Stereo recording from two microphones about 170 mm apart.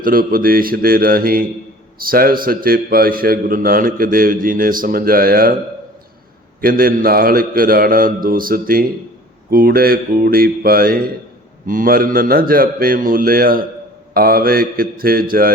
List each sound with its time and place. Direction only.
0.0 s a man's voice: 60° right (ahead or behind)
6.6 s a man's voice: 55° right (ahead or behind)